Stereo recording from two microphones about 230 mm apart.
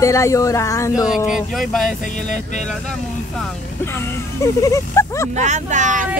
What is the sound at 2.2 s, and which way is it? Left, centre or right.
Speech, left.